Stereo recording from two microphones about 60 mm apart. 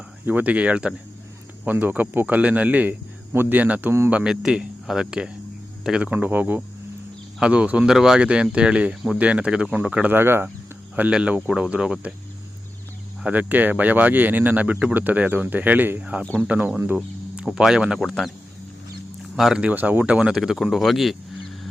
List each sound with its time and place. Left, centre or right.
0.3 s speech: right
4.3 s speech: centre
6.0 s speech: right
7.3 s speech: centre
10.1 s speech: right
11.1 s speech: centre
13.3 s speech: right
17.4 s speech: centre
19.4 s speech: centre
19.7 s speech: right
20.3 s speech: centre